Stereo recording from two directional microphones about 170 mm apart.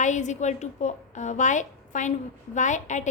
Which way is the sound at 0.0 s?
45° left (ahead or behind).